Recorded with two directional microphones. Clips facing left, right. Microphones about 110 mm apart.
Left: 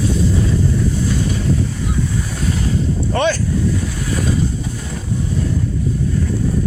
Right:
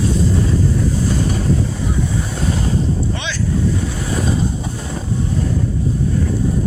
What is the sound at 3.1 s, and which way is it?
Boat, 50° left (ahead or behind).